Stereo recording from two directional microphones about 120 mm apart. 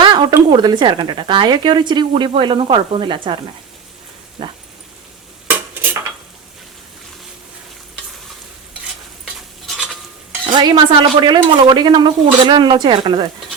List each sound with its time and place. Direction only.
0.0 s a woman's voice: 40° right (ahead or behind)
9.2 s stir: centre (ahead or behind)
10.4 s a woman's voice: 40° right (ahead or behind)